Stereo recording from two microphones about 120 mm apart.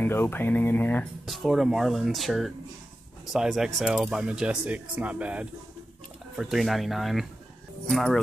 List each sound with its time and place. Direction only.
0.0 s speech: 15° left (ahead or behind)
1.2 s speech: centre (ahead or behind)